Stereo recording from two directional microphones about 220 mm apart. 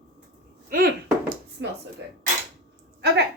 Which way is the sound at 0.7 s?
40° right (ahead or behind).